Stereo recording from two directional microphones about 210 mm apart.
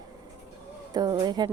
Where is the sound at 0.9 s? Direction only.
20° right (ahead or behind).